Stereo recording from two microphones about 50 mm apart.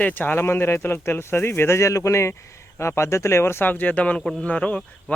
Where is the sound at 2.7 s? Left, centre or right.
Left.